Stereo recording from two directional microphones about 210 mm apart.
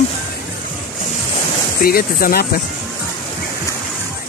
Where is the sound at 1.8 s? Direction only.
45° left (ahead or behind).